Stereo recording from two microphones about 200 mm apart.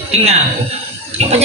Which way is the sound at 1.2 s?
30° right (ahead or behind).